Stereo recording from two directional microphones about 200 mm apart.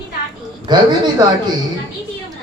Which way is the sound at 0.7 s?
20° right (ahead or behind).